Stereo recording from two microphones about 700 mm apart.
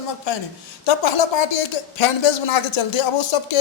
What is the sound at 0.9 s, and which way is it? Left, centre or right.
Speech, left.